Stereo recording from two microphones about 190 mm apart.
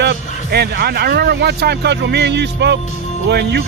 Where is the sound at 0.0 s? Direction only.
60° right (ahead or behind).